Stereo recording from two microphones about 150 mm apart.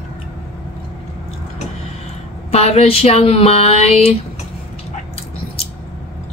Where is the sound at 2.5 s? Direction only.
45° left (ahead or behind).